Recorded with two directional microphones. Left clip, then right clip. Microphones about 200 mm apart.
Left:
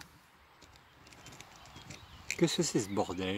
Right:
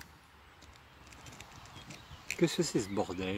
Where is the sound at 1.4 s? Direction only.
10° left (ahead or behind).